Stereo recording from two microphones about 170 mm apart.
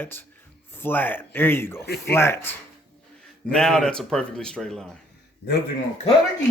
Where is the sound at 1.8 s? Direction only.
65° left (ahead or behind).